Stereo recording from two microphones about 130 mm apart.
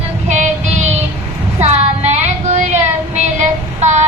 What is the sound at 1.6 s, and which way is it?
Child singing, 60° right (ahead or behind).